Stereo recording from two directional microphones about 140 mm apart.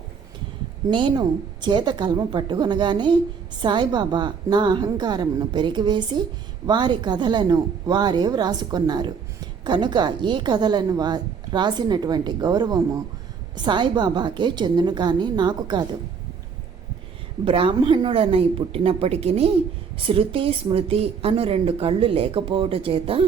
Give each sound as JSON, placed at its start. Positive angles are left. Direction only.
{"t": 0.9, "sound": "a woman's voice", "side_deg": -35}
{"t": 17.4, "sound": "a woman's voice", "side_deg": -40}